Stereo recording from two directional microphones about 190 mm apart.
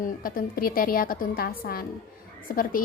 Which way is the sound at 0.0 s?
50° left (ahead or behind).